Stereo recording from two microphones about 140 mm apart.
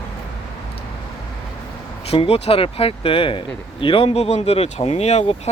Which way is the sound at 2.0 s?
45° left (ahead or behind).